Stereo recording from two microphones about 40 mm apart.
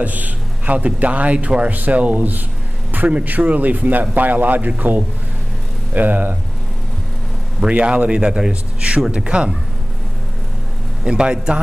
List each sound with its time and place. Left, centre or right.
0.0 s a man's voice: right
7.7 s a man's voice: right
11.1 s a man's voice: right